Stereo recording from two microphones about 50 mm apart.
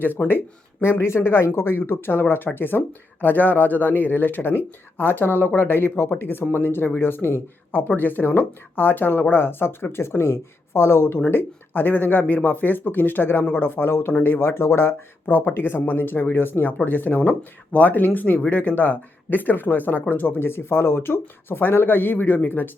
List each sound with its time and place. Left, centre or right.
0.3 s speech: left
17.2 s speech: left
20.4 s speech: left